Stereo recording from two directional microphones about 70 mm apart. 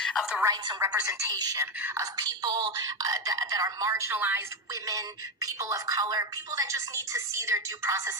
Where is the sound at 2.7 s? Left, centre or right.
Right.